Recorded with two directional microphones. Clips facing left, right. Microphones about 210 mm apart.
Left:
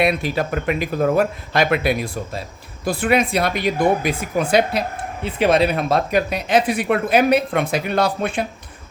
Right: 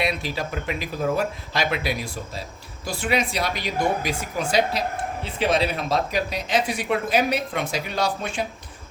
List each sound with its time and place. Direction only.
0.0 s speech: 55° left (ahead or behind)